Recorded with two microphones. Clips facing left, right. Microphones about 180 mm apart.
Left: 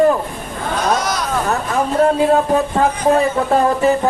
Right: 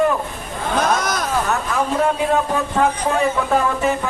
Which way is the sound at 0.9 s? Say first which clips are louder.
Left 2 dB; 50° right (ahead or behind).